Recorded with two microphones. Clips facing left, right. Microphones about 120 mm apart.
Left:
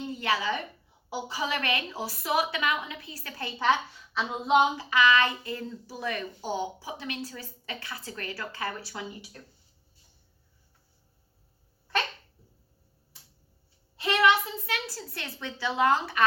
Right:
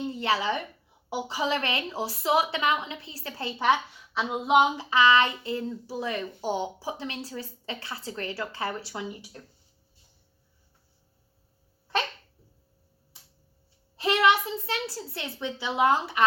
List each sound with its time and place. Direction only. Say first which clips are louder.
0.1 s a sound: right 1 dB; 30° right (ahead or behind)
1.1 s a child's voice: right 3 dB; 25° right (ahead or behind)
3.6 s speech: right 1 dB; 15° right (ahead or behind)
4.8 s a child's voice: right 2 dB; 25° right (ahead or behind)
13.9 s a sound: right 3 dB; 35° right (ahead or behind)
14.2 s a child's voice: even; 25° right (ahead or behind)